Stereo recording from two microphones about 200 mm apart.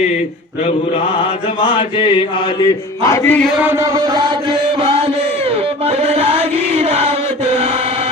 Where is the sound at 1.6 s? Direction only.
25° left (ahead or behind); by 3.5 s 10° left (ahead or behind).